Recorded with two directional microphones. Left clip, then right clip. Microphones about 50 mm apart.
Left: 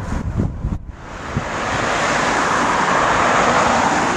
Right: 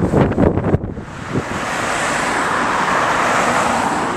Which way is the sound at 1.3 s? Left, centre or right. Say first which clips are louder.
Even; centre.